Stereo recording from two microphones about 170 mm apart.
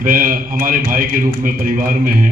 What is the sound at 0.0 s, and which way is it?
A man's voice, 55° right (ahead or behind).